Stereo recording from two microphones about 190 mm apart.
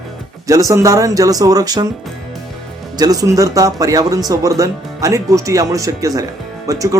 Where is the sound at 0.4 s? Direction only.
15° right (ahead or behind).